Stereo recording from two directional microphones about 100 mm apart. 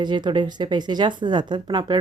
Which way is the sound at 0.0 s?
50° right (ahead or behind).